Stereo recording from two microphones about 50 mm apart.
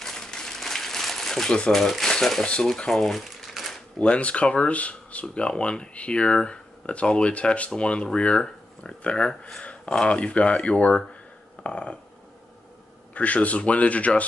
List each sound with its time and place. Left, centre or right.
0.0 s a sound: centre
1.7 s speech: centre
2.8 s crumpling: centre
4.0 s speech: left
13.1 s speech: left